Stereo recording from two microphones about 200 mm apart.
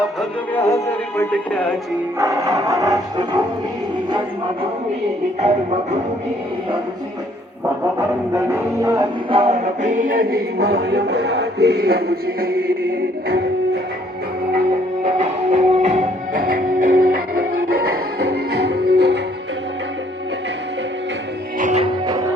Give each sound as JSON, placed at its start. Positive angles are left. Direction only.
{"t": 0.5, "sound": "music", "side_deg": 15}
{"t": 2.1, "sound": "music", "side_deg": -15}
{"t": 7.9, "sound": "music", "side_deg": -15}
{"t": 9.4, "sound": "music", "side_deg": -35}
{"t": 15.0, "sound": "music", "side_deg": -35}
{"t": 21.6, "sound": "music", "side_deg": -35}
{"t": 21.8, "sound": "music", "side_deg": -20}